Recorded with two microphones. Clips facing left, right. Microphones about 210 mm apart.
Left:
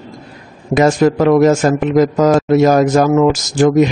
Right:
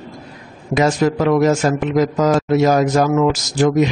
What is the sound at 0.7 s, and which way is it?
A man's voice, 50° left (ahead or behind).